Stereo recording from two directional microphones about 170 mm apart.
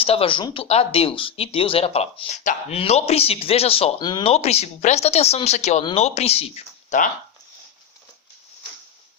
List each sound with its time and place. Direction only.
0.0 s speech: 35° left (ahead or behind)